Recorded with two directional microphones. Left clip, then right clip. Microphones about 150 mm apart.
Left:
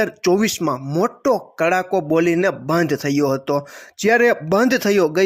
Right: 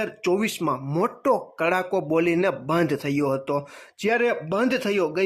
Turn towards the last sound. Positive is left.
turn(degrees=30)  # may be behind; listen again after turning